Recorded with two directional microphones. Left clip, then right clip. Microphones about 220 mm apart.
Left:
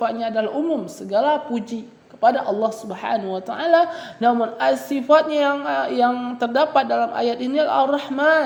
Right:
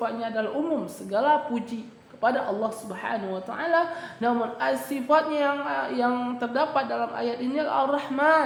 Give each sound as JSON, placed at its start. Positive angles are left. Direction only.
{"t": 0.0, "sound": "a woman's voice", "side_deg": 25}